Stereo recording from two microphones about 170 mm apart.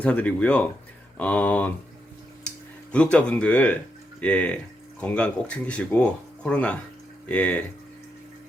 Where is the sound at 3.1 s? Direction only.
10° left (ahead or behind).